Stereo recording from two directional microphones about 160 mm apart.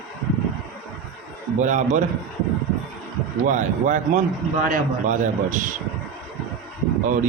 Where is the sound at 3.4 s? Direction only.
50° right (ahead or behind).